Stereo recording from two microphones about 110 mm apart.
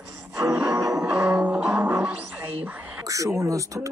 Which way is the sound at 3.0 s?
30° right (ahead or behind).